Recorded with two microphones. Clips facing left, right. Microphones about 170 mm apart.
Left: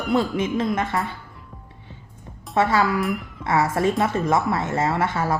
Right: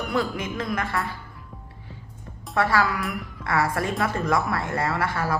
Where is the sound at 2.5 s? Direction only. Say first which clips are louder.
Left 3 dB; 20° left (ahead or behind).